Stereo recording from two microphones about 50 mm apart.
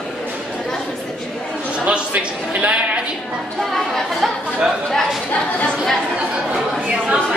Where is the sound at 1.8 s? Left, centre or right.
Right.